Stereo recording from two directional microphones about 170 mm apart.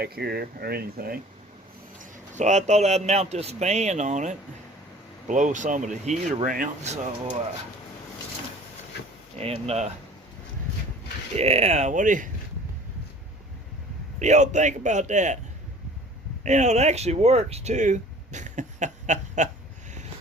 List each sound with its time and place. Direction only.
0.0 s speech: 65° right (ahead or behind)
2.0 s a man's voice: 45° right (ahead or behind)
9.4 s a man's voice: 35° right (ahead or behind)
11.3 s a man's voice: 40° right (ahead or behind)
14.2 s speech: 45° right (ahead or behind)
16.4 s speech: 45° right (ahead or behind)